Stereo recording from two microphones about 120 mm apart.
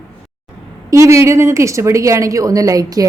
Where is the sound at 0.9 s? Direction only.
25° right (ahead or behind).